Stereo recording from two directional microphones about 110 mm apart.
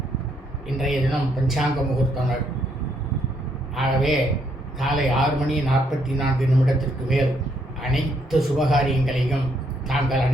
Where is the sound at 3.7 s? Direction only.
Centre (ahead or behind).